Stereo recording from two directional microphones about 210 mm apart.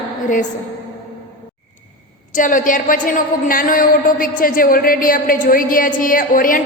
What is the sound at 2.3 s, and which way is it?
A woman's voice, 40° left (ahead or behind).